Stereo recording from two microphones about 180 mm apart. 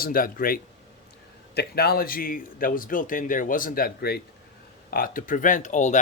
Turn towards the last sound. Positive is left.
turn(degrees=40)  # may be behind; listen again after turning